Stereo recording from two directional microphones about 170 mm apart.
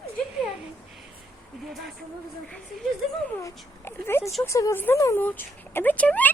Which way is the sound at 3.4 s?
15° left (ahead or behind).